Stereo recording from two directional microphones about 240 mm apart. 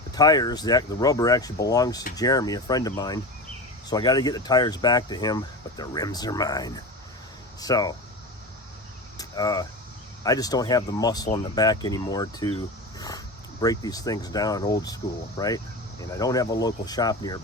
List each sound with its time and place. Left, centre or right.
0.1 s speech: centre
9.1 s a sound: centre
10.2 s speech: centre